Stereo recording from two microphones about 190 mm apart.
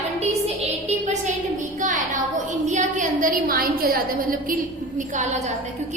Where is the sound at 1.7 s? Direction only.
40° right (ahead or behind).